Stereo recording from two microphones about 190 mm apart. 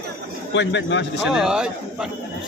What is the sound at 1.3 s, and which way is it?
Speech, 5° right (ahead or behind).